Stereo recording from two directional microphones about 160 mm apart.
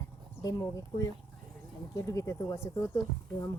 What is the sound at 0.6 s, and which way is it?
Speech, 20° left (ahead or behind).